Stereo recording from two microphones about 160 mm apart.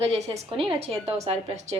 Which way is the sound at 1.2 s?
45° right (ahead or behind).